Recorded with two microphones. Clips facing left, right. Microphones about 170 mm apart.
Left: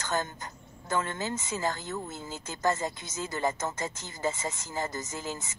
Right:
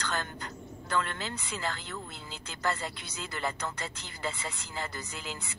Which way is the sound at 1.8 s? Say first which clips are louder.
Left 5 dB; 45° left (ahead or behind).